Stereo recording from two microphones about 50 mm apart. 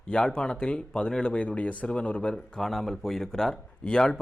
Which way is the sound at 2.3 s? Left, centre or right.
Centre.